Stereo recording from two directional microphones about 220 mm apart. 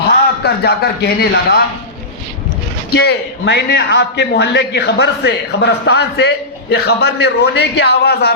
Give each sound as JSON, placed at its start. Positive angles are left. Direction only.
{"t": 0.4, "sound": "a man's voice", "side_deg": 45}
{"t": 2.9, "sound": "a man's voice", "side_deg": 50}